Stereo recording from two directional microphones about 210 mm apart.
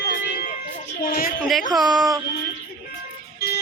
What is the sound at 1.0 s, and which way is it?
Speech, 45° left (ahead or behind).